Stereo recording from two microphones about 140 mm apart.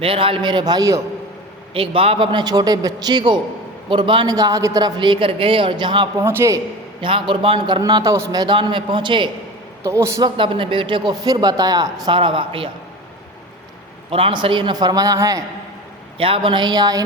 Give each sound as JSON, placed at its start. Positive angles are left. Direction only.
{"t": 0.0, "sound": "speech", "side_deg": -40}
{"t": 1.7, "sound": "speech", "side_deg": -40}
{"t": 6.2, "sound": "a man's voice", "side_deg": -20}
{"t": 7.0, "sound": "a man's voice", "side_deg": -40}
{"t": 9.8, "sound": "a man's voice", "side_deg": -20}
{"t": 10.2, "sound": "speech", "side_deg": -35}
{"t": 14.1, "sound": "speech", "side_deg": -40}
{"t": 16.1, "sound": "speech", "side_deg": -40}